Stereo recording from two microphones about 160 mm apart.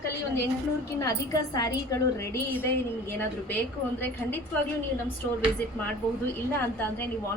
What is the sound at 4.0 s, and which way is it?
Speech, 10° left (ahead or behind).